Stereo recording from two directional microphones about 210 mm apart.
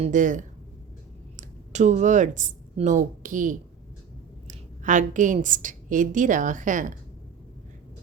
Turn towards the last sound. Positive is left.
turn(degrees=-40)  # may be behind; listen again after turning